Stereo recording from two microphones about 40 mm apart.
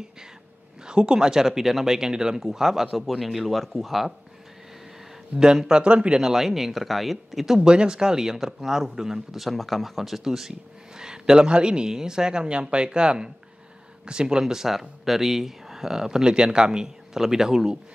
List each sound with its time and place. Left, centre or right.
0.8 s speech: right; by 4.1 s centre
5.4 s a man's voice: centre
6.2 s speech: centre
7.5 s a man's voice: right
14.4 s speech: centre